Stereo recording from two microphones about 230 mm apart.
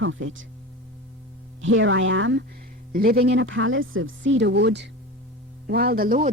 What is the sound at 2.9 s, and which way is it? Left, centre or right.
Speech, right.